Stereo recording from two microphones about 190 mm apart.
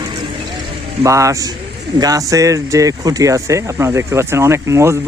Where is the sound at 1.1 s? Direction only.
15° right (ahead or behind).